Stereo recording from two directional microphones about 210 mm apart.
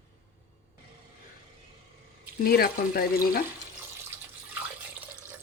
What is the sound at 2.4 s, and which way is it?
Speech, 45° left (ahead or behind).